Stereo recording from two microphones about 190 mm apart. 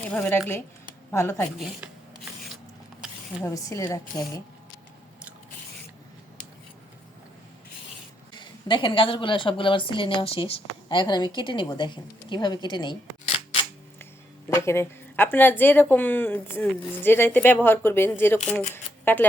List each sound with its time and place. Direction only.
0.0 s a woman's voice: 10° left (ahead or behind)
1.5 s speech: centre (ahead or behind)
3.4 s a woman's voice: 20° left (ahead or behind)
8.3 s a woman's voice: 25° left (ahead or behind)
14.5 s a woman's voice: 15° left (ahead or behind)
18.7 s shuffling cards: 10° left (ahead or behind)